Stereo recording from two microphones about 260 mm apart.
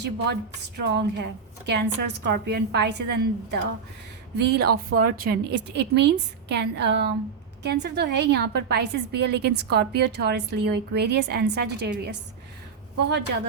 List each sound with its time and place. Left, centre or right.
0.8 s a woman's voice: right